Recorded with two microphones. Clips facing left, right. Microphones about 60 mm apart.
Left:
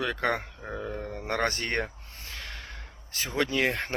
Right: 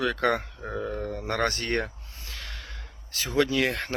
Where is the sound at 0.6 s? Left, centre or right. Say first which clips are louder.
Right 4 dB; centre.